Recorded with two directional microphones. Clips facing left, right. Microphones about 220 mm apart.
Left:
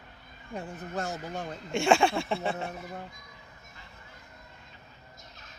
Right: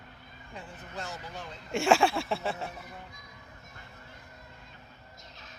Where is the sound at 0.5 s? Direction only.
45° left (ahead or behind).